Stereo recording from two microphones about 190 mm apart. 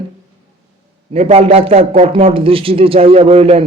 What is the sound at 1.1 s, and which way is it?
A man's voice, 35° right (ahead or behind).